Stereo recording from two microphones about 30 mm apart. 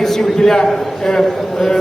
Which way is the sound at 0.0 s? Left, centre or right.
Centre.